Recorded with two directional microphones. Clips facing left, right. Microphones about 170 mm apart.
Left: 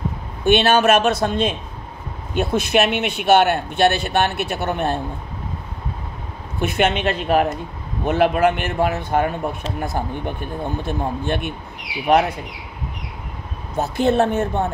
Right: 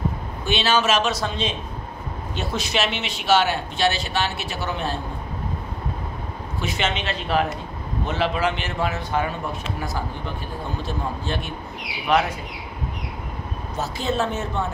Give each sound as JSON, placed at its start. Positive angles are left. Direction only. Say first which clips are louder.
{"t": 0.5, "sound": "speech", "louder": "left 6 dB", "side_deg": 55}
{"t": 6.6, "sound": "speech", "louder": "left 7 dB", "side_deg": 55}
{"t": 13.7, "sound": "speech", "louder": "left 7 dB", "side_deg": 60}